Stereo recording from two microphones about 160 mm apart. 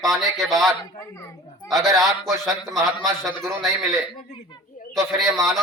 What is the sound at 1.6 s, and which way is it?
A man's voice, centre (ahead or behind).